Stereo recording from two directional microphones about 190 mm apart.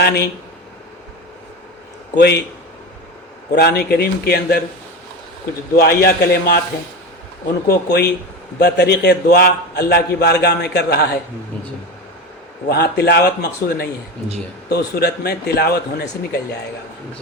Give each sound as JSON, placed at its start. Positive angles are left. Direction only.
{"t": 0.0, "sound": "a man's voice", "side_deg": 55}
{"t": 2.1, "sound": "a man's voice", "side_deg": 60}
{"t": 3.5, "sound": "a man's voice", "side_deg": 55}
{"t": 5.7, "sound": "a man's voice", "side_deg": 55}
{"t": 7.7, "sound": "a man's voice", "side_deg": 55}
{"t": 12.6, "sound": "a man's voice", "side_deg": 55}